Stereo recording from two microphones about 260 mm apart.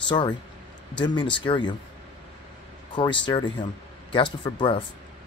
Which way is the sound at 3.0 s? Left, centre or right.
Centre.